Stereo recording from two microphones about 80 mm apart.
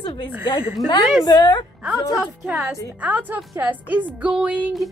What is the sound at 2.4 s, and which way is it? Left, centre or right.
A woman's voice, centre.